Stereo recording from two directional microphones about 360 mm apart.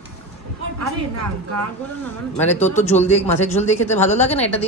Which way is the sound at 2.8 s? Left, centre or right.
Centre.